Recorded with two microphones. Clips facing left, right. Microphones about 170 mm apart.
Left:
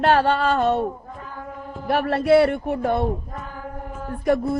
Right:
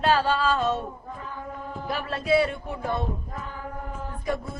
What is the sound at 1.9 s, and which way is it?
Speech, 65° left (ahead or behind).